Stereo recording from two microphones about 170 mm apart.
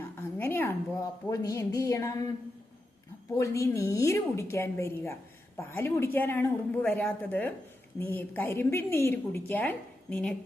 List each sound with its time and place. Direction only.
0.2 s a sound: 15° left (ahead or behind)
1.3 s speech: 20° left (ahead or behind)
3.3 s a woman's voice: 20° left (ahead or behind)